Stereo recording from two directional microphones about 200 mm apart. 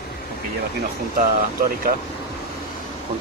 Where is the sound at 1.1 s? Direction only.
45° right (ahead or behind).